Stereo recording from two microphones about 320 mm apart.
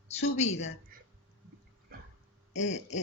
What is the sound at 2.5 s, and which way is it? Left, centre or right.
Speech, left.